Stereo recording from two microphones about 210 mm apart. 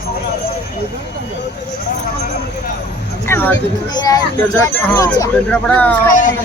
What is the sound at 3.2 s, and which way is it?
Speech, 10° left (ahead or behind).